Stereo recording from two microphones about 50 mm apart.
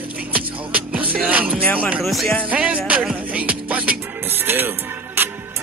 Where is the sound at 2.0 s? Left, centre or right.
Centre.